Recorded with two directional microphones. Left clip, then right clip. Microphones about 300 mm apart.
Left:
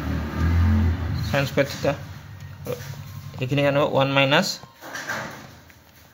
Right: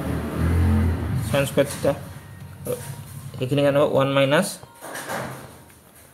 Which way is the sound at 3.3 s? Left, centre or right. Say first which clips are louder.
Right 2 dB; centre.